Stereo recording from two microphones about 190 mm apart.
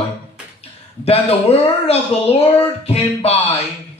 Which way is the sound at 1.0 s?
30° left (ahead or behind).